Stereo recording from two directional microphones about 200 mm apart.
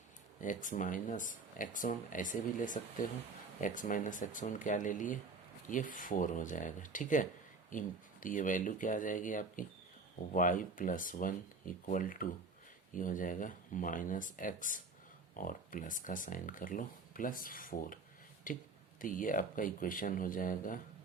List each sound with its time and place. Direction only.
0.4 s speech: 40° left (ahead or behind)